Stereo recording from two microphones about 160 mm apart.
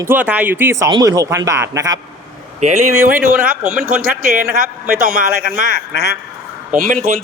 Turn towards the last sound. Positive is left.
turn(degrees=-60)  # may be behind; listen again after turning